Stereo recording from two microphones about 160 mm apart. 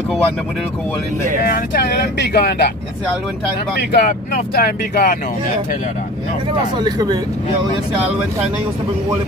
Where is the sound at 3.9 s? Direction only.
90° left.